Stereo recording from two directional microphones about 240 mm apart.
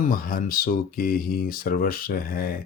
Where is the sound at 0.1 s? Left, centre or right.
Left.